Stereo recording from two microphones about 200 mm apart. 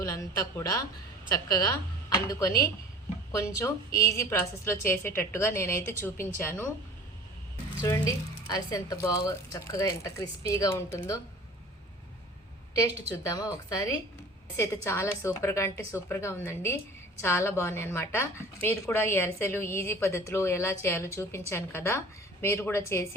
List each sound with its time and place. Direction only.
0.0 s a woman's voice: 15° left (ahead or behind)
7.8 s a woman's voice: 15° left (ahead or behind)
12.7 s a woman's voice: 15° left (ahead or behind)